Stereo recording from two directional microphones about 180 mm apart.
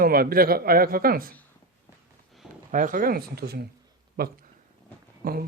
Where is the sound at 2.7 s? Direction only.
45° right (ahead or behind).